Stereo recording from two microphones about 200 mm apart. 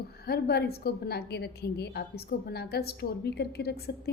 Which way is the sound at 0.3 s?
50° left (ahead or behind).